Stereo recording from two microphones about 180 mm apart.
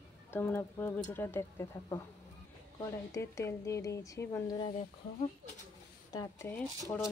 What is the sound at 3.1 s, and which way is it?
Speech, 15° left (ahead or behind).